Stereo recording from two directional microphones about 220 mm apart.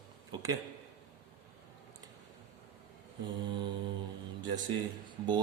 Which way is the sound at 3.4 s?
20° right (ahead or behind).